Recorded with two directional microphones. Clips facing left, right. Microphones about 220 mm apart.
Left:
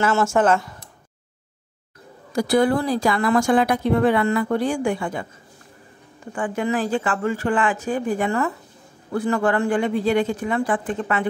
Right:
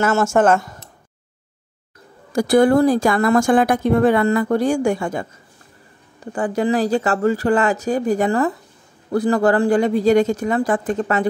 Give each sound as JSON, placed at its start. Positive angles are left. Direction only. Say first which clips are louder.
{"t": 0.0, "sound": "a woman's voice", "louder": "right 3 dB", "side_deg": -45}
{"t": 2.3, "sound": "a woman's voice", "louder": "right 5 dB", "side_deg": -50}
{"t": 6.3, "sound": "speech", "louder": "right 4 dB", "side_deg": -35}